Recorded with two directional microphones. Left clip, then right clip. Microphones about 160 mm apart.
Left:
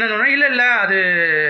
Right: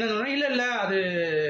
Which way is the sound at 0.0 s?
40° right (ahead or behind).